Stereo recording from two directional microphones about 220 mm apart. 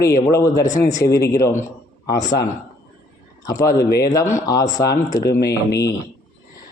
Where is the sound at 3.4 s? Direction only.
15° left (ahead or behind).